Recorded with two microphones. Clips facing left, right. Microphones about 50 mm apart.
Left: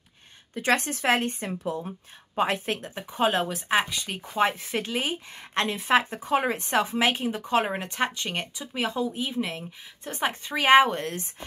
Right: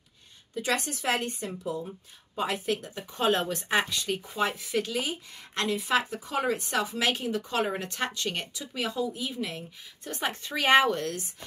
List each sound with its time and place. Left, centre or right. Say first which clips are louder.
0.6 s a woman's voice: left 5 dB; left
3.1 s speech: left 2 dB; centre
4.4 s a woman's voice: left 5 dB; left; by 8.8 s centre
8.8 s a woman's voice: left 3 dB; left
9.6 s speech: left 2 dB; centre
10.9 s speech: right 1 dB; left